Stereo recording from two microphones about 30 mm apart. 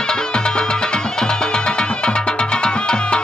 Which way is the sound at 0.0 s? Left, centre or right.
Left.